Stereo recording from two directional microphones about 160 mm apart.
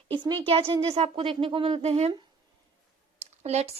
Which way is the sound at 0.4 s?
35° right (ahead or behind).